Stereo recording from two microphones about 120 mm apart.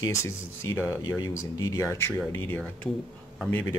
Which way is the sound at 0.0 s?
25° left (ahead or behind).